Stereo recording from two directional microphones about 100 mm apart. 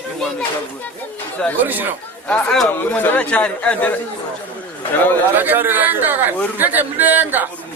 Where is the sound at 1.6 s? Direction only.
20° right (ahead or behind).